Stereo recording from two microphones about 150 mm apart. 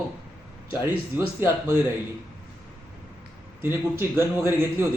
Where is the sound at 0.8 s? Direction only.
15° right (ahead or behind).